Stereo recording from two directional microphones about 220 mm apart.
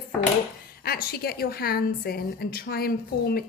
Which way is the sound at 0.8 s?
45° left (ahead or behind).